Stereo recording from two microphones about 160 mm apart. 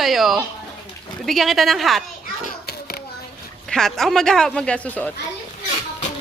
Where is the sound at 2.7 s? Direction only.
75° left (ahead or behind).